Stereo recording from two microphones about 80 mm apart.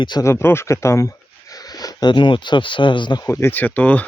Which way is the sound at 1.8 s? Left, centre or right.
Left.